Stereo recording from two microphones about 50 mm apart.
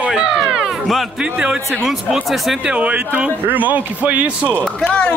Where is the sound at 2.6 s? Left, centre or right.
Right.